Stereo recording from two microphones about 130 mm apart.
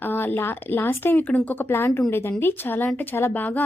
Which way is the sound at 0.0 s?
15° left (ahead or behind).